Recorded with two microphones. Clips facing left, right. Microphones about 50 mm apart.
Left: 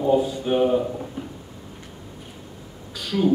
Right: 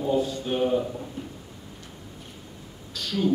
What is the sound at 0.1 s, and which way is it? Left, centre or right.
Speech, centre.